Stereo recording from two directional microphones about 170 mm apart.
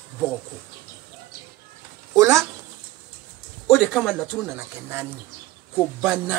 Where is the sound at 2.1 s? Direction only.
20° right (ahead or behind).